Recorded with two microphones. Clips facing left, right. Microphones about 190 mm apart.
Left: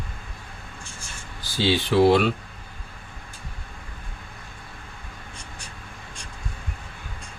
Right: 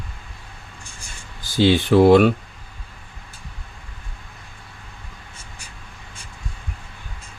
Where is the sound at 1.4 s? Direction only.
50° right (ahead or behind).